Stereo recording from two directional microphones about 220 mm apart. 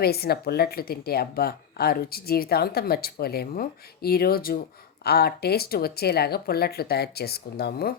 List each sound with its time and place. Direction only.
0.0 s speech: 45° left (ahead or behind)